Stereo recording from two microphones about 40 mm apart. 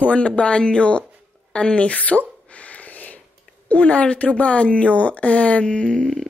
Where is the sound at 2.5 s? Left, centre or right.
Left.